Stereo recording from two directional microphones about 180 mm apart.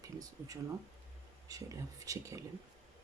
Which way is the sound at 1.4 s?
20° right (ahead or behind).